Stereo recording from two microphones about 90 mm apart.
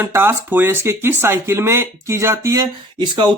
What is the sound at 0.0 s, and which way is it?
Speech, 25° right (ahead or behind).